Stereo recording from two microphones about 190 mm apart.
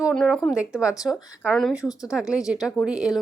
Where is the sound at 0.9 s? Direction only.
20° left (ahead or behind).